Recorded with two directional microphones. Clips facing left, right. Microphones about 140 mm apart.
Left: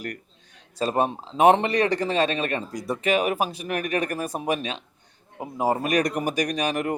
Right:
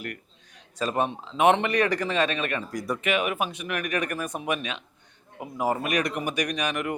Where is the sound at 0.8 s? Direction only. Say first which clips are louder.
Left 3 dB; 35° left (ahead or behind).